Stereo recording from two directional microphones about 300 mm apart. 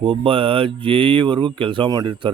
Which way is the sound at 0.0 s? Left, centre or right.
Centre.